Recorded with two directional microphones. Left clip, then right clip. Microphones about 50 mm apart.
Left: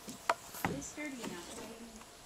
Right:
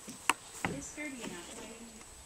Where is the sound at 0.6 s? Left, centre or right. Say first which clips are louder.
Right 1 dB; centre.